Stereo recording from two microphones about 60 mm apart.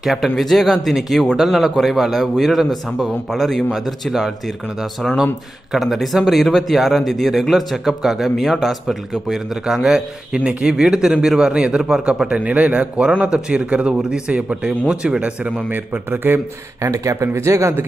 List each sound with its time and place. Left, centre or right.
0.0 s speech: centre
5.7 s speech: centre
9.8 s a man's voice: centre
15.7 s a man's voice: right
16.8 s speech: right